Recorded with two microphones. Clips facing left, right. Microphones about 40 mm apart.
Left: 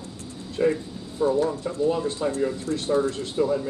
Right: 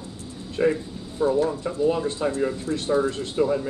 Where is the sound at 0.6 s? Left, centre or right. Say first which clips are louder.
Right 1 dB; centre.